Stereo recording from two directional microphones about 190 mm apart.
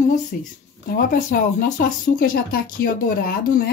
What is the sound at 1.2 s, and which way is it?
Speech, 45° left (ahead or behind).